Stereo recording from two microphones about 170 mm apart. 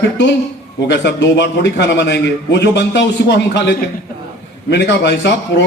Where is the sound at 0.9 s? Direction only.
90° left.